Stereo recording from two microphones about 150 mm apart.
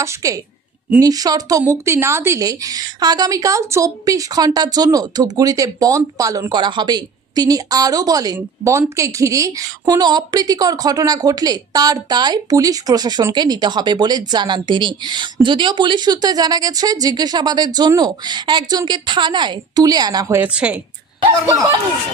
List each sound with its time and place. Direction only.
0.0 s speech: 20° right (ahead or behind)